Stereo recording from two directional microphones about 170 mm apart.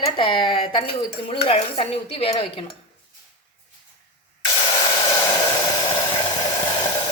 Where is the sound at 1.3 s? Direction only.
35° left (ahead or behind).